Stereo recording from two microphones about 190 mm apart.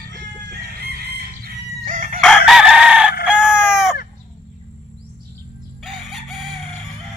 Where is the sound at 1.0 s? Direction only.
55° right (ahead or behind).